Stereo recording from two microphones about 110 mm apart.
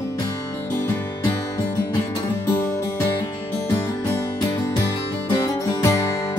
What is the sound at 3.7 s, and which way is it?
Music, 30° left (ahead or behind).